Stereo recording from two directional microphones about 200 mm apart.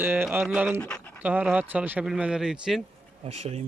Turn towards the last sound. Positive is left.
turn(degrees=-30)  # may be behind; listen again after turning